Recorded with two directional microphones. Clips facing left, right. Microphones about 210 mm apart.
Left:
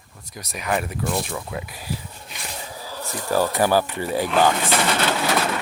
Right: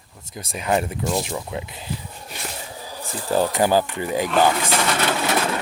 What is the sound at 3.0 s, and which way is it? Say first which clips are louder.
Speech: right 1 dB; 15° right (ahead or behind).